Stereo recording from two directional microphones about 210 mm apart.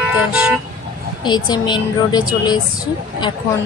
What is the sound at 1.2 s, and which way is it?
Speech, 20° left (ahead or behind).